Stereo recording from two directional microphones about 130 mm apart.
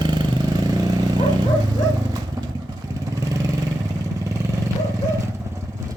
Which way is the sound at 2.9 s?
25° right (ahead or behind).